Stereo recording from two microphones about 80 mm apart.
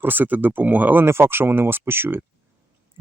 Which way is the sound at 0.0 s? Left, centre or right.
Right.